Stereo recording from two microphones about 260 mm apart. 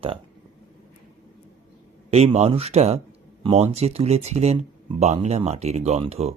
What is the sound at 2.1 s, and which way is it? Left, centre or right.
Speech, right.